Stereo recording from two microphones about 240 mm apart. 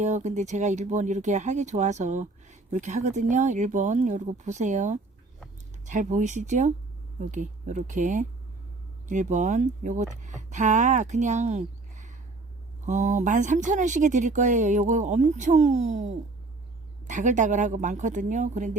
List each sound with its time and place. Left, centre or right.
0.0 s speech: right